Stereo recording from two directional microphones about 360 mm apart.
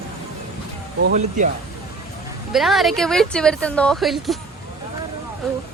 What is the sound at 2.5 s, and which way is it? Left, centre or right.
A woman's voice, centre.